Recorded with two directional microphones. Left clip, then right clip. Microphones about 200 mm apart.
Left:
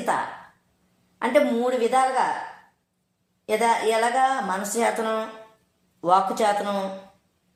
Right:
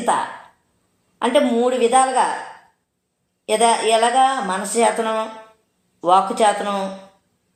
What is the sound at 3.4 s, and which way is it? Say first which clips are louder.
A woman's voice: right 5 dB; 25° left (ahead or behind).